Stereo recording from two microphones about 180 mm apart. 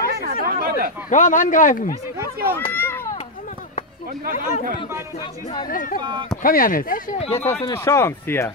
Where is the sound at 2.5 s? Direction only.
10° left (ahead or behind).